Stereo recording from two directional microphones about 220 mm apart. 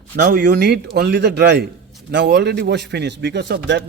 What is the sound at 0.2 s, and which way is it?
A man's voice, 40° right (ahead or behind).